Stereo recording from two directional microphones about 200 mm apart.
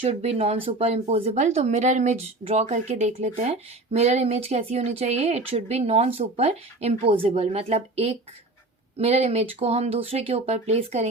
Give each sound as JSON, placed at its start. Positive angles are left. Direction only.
{"t": 0.0, "sound": "speech", "side_deg": -30}